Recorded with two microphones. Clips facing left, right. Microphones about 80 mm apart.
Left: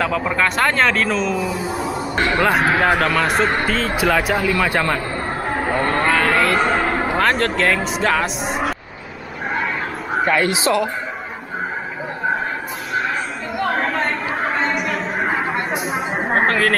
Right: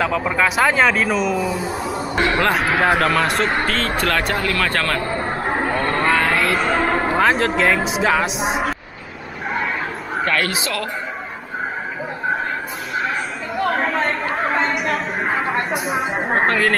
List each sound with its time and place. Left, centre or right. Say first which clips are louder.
0.0 s speech: even; centre
5.7 s vehicle: left 2 dB; centre
7.2 s speech: right 1 dB; centre
10.2 s speech: left 4 dB; centre
13.7 s chatter: even; centre